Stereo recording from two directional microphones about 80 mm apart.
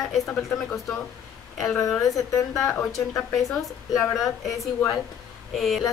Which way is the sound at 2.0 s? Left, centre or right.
Left.